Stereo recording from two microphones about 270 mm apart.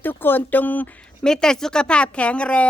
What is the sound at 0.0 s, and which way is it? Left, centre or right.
Speech, centre.